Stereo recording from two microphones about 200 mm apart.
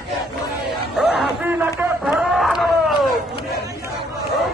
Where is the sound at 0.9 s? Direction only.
Centre (ahead or behind).